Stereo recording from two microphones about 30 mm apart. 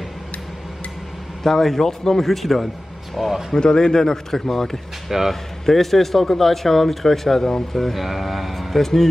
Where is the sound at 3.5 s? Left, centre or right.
Left.